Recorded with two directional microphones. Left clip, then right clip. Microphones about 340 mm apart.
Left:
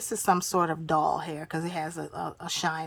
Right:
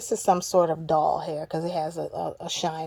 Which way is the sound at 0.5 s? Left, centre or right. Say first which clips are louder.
Right 4 dB; left.